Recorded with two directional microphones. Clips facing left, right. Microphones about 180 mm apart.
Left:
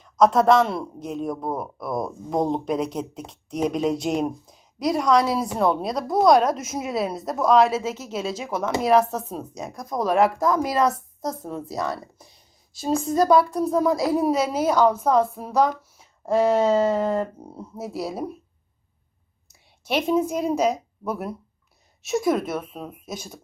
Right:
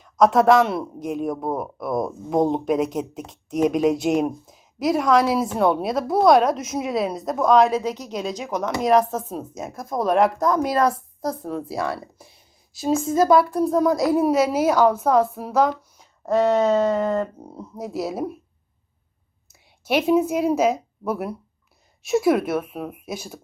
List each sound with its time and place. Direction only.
0.0 s speech: centre (ahead or behind)
16.4 s a sound: 5° left (ahead or behind)
16.7 s speech: 5° left (ahead or behind)
19.5 s a woman's voice: 5° right (ahead or behind)